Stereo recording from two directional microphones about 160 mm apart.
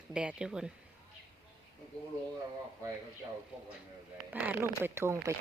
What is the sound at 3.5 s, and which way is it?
A woman's voice, 5° right (ahead or behind).